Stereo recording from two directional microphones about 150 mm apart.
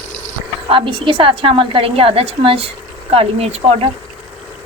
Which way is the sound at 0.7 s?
35° right (ahead or behind).